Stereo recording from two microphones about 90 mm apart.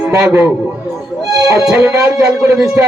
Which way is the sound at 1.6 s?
5° right (ahead or behind).